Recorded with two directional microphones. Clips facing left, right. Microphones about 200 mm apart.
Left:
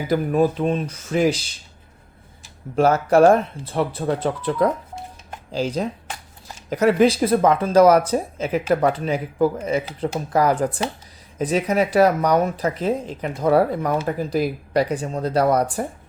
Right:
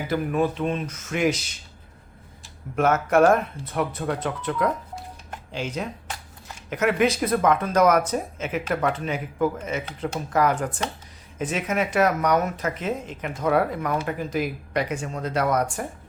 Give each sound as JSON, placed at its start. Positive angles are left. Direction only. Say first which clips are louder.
{"t": 0.1, "sound": "speech", "louder": "left 5 dB", "side_deg": 40}
{"t": 2.7, "sound": "speech", "louder": "left 4 dB", "side_deg": 30}